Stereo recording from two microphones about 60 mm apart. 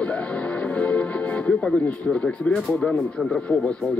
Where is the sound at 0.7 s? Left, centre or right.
Left.